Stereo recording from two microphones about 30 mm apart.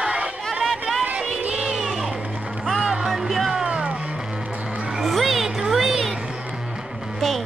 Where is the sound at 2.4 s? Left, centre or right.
Right.